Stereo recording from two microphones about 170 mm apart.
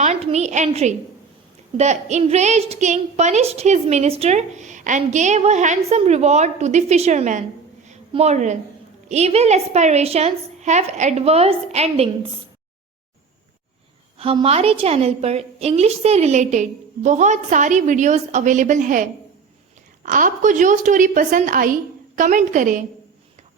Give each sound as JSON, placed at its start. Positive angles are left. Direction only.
{"t": 0.0, "sound": "a woman's voice", "side_deg": -40}
{"t": 7.9, "sound": "a sound", "side_deg": -40}
{"t": 9.0, "sound": "a woman's voice", "side_deg": -40}
{"t": 14.2, "sound": "a woman's voice", "side_deg": -35}